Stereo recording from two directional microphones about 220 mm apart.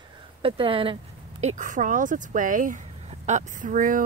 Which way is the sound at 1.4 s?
35° right (ahead or behind).